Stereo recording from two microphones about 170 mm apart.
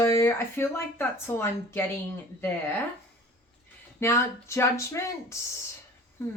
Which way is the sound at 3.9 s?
15° left (ahead or behind).